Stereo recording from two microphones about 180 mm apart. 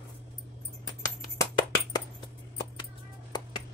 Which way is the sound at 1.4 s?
20° left (ahead or behind).